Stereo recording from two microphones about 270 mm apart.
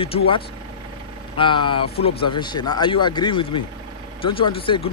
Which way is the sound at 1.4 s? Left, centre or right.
Centre.